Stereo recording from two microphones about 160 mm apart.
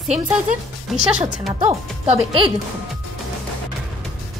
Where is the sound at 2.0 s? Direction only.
35° right (ahead or behind).